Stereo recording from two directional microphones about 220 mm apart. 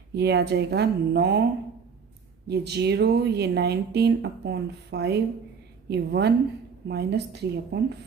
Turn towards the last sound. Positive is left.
turn(degrees=-50)  # may be behind; listen again after turning